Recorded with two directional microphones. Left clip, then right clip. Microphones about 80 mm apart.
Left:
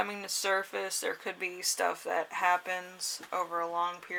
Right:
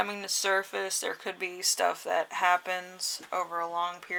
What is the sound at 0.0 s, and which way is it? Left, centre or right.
Speech, right.